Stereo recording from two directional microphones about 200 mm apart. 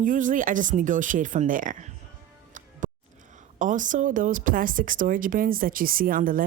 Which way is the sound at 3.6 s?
40° right (ahead or behind).